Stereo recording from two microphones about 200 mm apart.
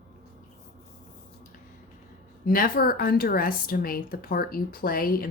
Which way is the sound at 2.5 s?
45° left (ahead or behind).